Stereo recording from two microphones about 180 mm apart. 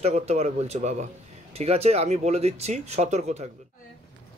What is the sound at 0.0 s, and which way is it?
Speech, 35° right (ahead or behind).